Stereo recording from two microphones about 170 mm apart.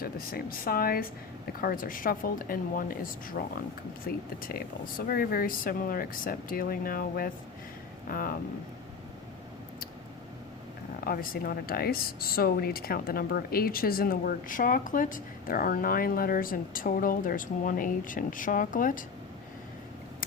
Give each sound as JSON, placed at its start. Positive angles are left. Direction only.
{"t": 0.0, "sound": "speech", "side_deg": 60}
{"t": 11.0, "sound": "speech", "side_deg": 55}